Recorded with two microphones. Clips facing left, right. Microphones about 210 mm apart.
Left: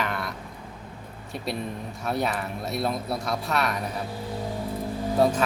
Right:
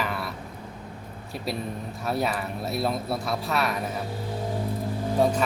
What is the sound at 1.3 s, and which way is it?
Speech, centre (ahead or behind).